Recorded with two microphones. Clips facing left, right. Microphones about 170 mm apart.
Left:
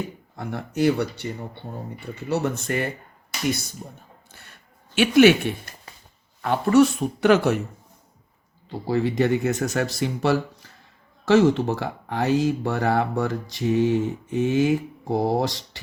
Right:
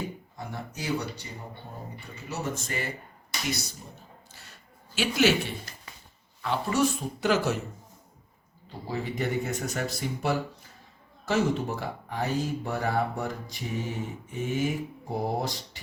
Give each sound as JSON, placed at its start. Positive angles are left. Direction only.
{"t": 0.3, "sound": "speech", "side_deg": 65}
{"t": 2.3, "sound": "speech", "side_deg": 65}
{"t": 4.3, "sound": "a sound", "side_deg": 55}
{"t": 4.9, "sound": "speech", "side_deg": 60}
{"t": 5.9, "sound": "a sound", "side_deg": 35}
{"t": 6.4, "sound": "speech", "side_deg": 60}
{"t": 8.9, "sound": "speech", "side_deg": 85}